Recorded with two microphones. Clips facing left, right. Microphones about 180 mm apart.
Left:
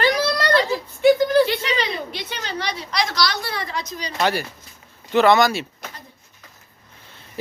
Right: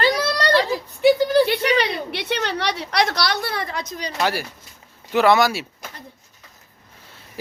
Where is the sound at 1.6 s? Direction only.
65° right (ahead or behind).